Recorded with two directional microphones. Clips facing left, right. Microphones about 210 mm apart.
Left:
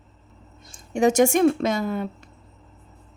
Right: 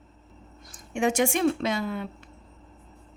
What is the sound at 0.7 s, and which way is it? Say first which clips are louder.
Speech: left 6 dB; 40° left (ahead or behind).